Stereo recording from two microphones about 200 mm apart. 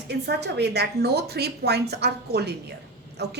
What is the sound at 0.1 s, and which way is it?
A woman's voice, 55° right (ahead or behind).